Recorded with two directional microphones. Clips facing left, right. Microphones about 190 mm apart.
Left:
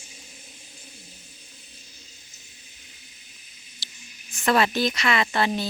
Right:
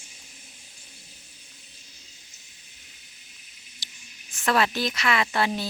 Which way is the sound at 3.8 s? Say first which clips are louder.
Left 2 dB; 15° right (ahead or behind).